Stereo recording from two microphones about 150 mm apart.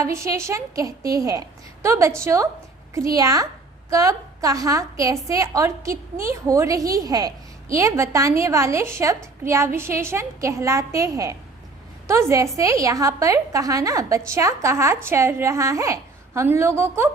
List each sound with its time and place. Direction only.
0.0 s a woman's voice: 20° right (ahead or behind)